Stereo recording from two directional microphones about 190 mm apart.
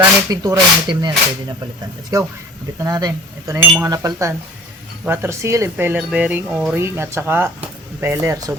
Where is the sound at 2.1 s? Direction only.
20° right (ahead or behind).